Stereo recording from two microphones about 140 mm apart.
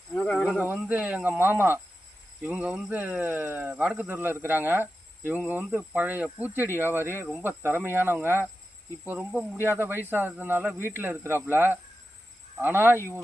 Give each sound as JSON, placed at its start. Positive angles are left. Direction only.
{"t": 0.1, "sound": "speech", "side_deg": 10}
{"t": 0.6, "sound": "speech", "side_deg": -15}